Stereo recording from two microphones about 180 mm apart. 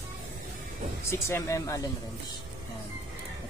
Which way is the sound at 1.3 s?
15° left (ahead or behind).